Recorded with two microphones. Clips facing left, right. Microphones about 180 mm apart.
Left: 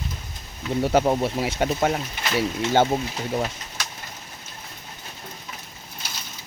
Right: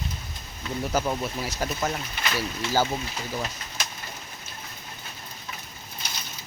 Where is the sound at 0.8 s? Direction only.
30° left (ahead or behind).